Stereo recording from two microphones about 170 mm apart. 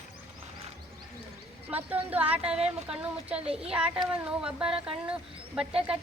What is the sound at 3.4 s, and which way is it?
Speech, 35° right (ahead or behind).